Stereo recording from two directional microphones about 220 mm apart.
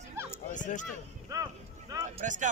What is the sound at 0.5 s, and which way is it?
Speech, 35° left (ahead or behind).